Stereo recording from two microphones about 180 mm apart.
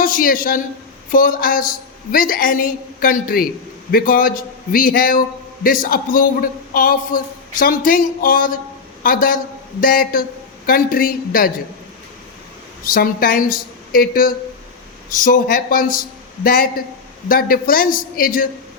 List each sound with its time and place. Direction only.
0.0 s a man's voice: 50° left (ahead or behind)
12.8 s a man's voice: 50° left (ahead or behind)